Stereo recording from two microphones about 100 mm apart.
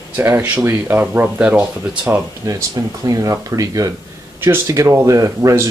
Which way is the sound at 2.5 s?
35° right (ahead or behind).